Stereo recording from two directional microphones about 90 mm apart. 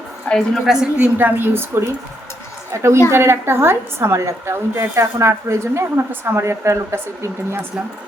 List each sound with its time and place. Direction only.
0.3 s a woman's voice: 15° left (ahead or behind)
0.6 s a woman's voice: 5° right (ahead or behind)
0.9 s a woman's voice: 20° right (ahead or behind)